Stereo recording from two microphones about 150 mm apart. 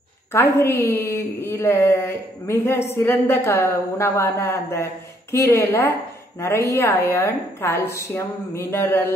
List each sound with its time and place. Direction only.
0.3 s a woman's voice: 15° left (ahead or behind)